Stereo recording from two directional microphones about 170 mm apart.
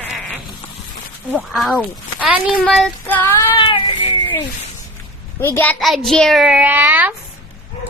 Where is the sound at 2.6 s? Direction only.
5° left (ahead or behind).